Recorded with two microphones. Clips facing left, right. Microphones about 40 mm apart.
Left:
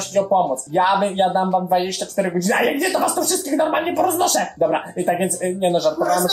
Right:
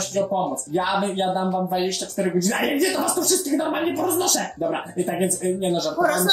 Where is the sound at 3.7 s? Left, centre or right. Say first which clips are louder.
Left 4 dB; left.